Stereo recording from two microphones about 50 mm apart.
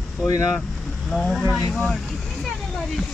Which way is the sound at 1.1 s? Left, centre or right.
Centre.